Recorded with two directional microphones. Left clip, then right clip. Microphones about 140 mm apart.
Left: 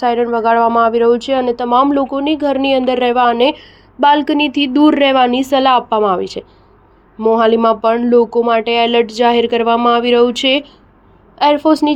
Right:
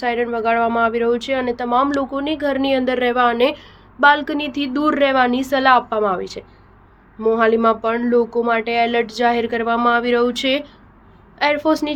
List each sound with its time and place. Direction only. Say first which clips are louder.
0.0 s a woman's voice: left 6 dB; 30° left (ahead or behind)
1.9 s a woman's voice: left 6 dB; 25° left (ahead or behind)